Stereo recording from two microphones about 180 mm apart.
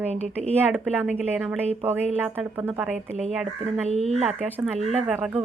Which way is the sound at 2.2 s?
10° right (ahead or behind).